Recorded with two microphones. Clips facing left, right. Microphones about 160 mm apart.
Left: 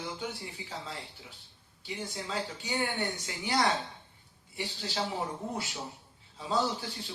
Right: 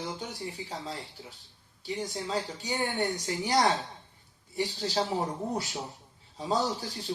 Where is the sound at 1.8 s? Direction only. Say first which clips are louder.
Right 4 dB; 40° right (ahead or behind).